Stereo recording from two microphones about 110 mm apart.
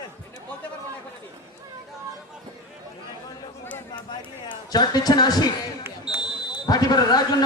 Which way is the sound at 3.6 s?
15° left (ahead or behind).